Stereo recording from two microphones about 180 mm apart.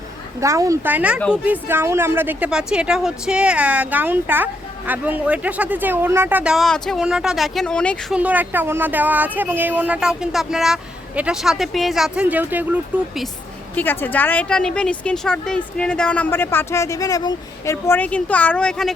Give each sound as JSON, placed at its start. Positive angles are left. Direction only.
{"t": 0.3, "sound": "speech", "side_deg": -15}
{"t": 8.1, "sound": "speech", "side_deg": -10}
{"t": 13.7, "sound": "a woman's voice", "side_deg": 10}